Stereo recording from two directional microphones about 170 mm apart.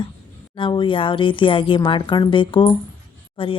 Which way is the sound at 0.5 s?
30° left (ahead or behind).